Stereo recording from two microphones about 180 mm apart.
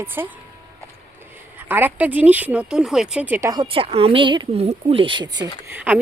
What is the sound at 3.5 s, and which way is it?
Speech, 30° right (ahead or behind).